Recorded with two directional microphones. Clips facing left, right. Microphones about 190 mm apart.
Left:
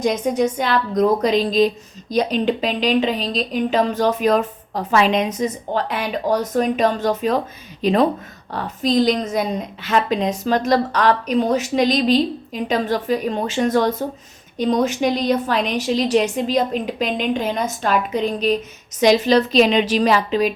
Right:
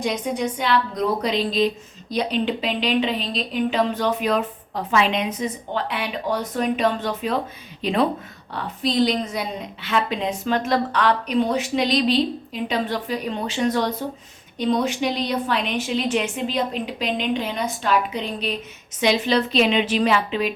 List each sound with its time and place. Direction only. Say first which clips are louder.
0.0 s a woman's voice: left 5 dB; 45° left (ahead or behind)